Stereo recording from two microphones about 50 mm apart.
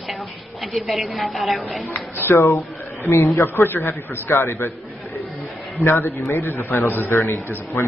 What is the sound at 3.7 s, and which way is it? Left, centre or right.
Speech, left.